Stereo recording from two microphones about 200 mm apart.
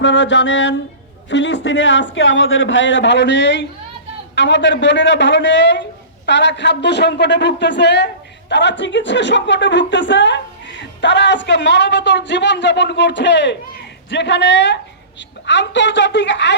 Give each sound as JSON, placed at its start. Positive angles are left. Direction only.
{"t": 0.0, "sound": "speech", "side_deg": 65}